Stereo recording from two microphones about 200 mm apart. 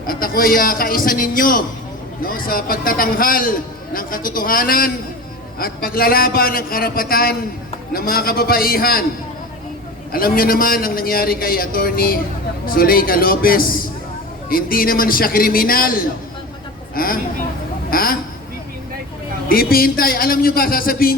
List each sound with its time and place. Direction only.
0.1 s a man's voice: 45° left (ahead or behind)
10.1 s a man's voice: 45° left (ahead or behind)
19.5 s a man's voice: 50° left (ahead or behind)